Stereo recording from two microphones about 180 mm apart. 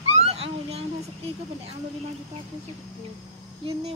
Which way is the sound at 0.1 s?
35° right (ahead or behind).